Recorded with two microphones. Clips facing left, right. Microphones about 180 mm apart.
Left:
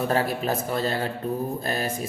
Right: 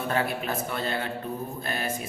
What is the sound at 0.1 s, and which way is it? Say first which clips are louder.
Speech: left 4 dB; 35° left (ahead or behind).